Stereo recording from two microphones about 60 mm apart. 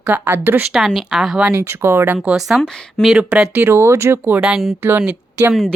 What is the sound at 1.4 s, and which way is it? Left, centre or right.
Speech, right.